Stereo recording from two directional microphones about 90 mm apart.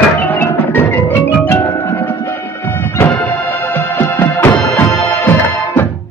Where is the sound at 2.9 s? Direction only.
20° left (ahead or behind).